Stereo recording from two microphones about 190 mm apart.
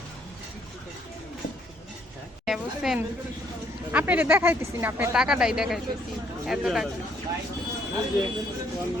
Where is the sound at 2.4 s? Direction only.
Centre (ahead or behind).